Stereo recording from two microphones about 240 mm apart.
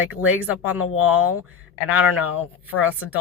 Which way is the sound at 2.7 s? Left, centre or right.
Left.